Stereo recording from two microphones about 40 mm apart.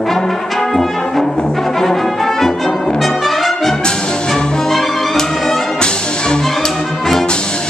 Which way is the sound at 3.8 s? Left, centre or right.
Left.